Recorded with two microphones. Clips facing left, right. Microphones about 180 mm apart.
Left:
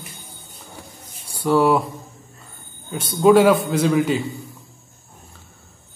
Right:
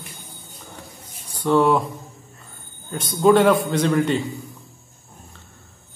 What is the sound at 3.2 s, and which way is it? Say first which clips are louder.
A man's voice: left 2 dB; 5° left (ahead or behind).